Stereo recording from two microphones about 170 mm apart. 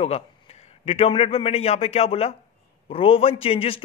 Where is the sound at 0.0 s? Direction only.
35° left (ahead or behind).